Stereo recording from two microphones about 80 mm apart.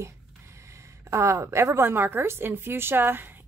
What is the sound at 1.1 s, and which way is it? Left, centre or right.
A woman's voice, right.